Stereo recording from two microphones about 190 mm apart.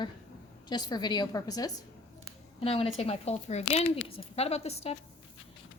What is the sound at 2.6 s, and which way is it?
A woman's voice, 30° left (ahead or behind).